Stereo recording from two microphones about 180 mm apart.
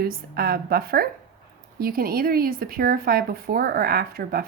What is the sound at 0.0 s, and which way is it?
Speech, 55° right (ahead or behind).